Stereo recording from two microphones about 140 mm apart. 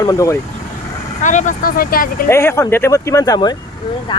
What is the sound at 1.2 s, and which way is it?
Speech, 60° left (ahead or behind).